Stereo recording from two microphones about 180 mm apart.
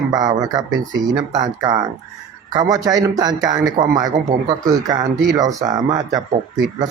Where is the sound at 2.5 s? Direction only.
20° right (ahead or behind).